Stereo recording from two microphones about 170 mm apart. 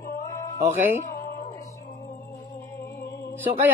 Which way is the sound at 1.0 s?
55° left (ahead or behind).